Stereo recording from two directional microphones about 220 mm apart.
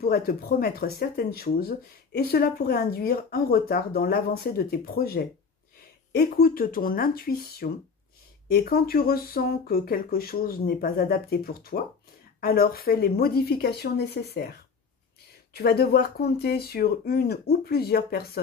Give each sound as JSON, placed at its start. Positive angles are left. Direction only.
{"t": 0.0, "sound": "speech", "side_deg": 45}
{"t": 15.5, "sound": "speech", "side_deg": 45}